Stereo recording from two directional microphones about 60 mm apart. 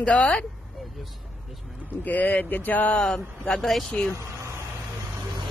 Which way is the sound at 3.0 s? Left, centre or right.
Centre.